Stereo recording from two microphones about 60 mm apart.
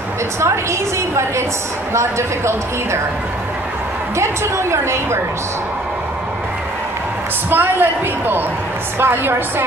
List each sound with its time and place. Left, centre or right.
0.4 s a woman's voice: right
4.2 s a woman's voice: right
7.4 s a man's voice: right